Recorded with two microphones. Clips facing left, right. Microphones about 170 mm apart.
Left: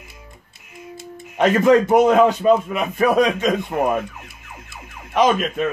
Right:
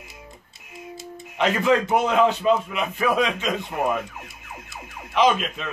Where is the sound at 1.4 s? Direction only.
45° left (ahead or behind).